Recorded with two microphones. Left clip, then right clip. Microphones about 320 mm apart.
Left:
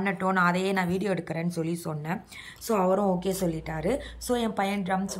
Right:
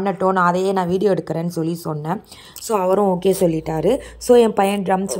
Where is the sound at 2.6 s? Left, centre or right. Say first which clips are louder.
Right 7 dB; centre.